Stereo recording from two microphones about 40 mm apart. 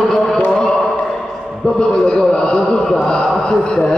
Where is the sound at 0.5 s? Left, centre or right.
Centre.